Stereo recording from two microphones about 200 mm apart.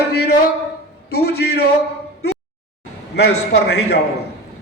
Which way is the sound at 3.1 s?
55° left (ahead or behind).